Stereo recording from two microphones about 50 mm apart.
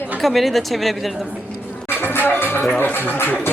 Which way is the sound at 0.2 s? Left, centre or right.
Centre.